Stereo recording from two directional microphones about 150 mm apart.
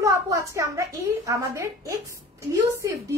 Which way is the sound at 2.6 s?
20° right (ahead or behind).